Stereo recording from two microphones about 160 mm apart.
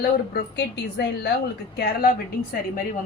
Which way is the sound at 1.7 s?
70° left (ahead or behind).